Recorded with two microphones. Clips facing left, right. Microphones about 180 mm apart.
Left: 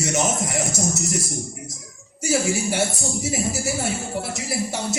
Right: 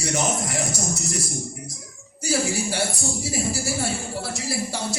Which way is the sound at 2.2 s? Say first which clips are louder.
Left 2 dB; 20° left (ahead or behind).